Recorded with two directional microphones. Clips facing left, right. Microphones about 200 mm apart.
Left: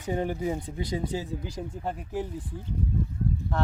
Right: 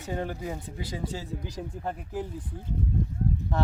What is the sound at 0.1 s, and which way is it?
Speech, 15° left (ahead or behind).